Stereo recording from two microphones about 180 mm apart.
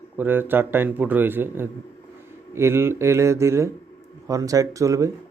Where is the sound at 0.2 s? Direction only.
10° right (ahead or behind).